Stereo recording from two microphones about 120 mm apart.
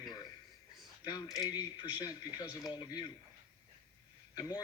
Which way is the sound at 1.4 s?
35° left (ahead or behind).